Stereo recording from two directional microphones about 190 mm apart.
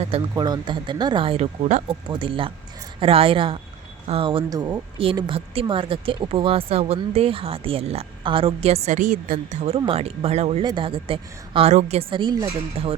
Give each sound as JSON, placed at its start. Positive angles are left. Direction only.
{"t": 0.0, "sound": "a woman's voice", "side_deg": -25}